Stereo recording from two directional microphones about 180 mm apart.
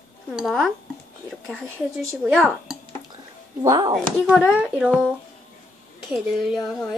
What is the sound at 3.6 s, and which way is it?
Speech, 20° right (ahead or behind).